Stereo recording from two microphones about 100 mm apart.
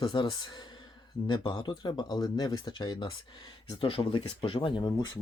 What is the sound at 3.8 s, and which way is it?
Speech, 60° left (ahead or behind).